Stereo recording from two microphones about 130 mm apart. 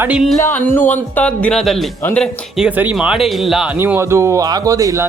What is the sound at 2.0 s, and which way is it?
Speech, 10° left (ahead or behind).